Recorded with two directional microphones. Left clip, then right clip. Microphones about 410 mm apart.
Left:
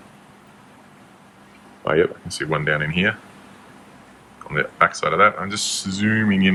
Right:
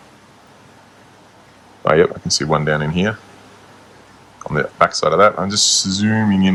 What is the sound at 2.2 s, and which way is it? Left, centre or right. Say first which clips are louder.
Speech: right 5 dB; centre.